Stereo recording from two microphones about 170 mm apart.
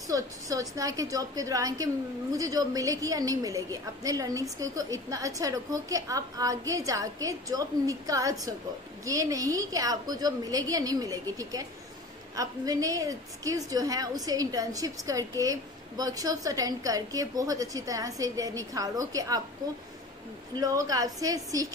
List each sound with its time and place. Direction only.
0.1 s a woman's voice: 20° right (ahead or behind)
20.5 s a woman's voice: 20° right (ahead or behind)